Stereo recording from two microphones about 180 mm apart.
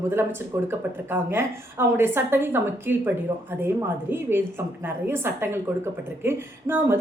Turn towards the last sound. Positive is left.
turn(degrees=-10)  # may be behind; listen again after turning